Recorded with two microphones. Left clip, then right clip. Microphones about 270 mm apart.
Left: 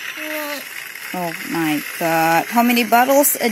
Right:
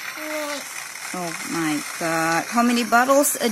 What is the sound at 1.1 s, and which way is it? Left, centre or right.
Frying, left.